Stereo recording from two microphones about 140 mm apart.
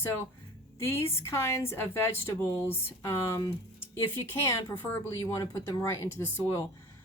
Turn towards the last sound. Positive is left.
turn(degrees=20)  # may be behind; listen again after turning